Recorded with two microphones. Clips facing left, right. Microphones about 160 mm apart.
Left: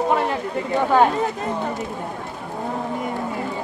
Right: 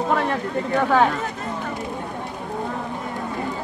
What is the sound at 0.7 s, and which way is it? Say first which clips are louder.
Speech: left 2 dB; 20° left (ahead or behind).